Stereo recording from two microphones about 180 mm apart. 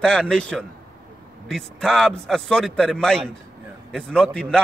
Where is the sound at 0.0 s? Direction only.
5° left (ahead or behind).